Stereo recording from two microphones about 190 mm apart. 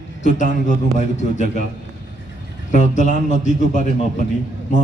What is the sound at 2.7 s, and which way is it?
A man's voice, 40° left (ahead or behind).